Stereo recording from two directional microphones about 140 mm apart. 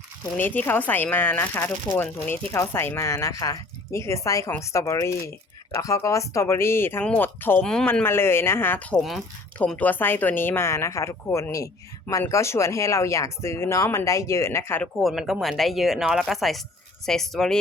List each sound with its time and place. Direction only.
0.3 s speech: 15° left (ahead or behind)
9.0 s speech: centre (ahead or behind); by 14.8 s 15° left (ahead or behind)
14.9 s speech: centre (ahead or behind)